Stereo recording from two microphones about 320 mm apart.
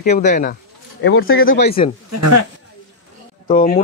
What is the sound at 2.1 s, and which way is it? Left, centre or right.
Speech, right.